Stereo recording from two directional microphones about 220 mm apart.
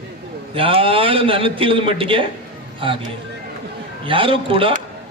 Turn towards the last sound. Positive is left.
turn(degrees=-25)  # may be behind; listen again after turning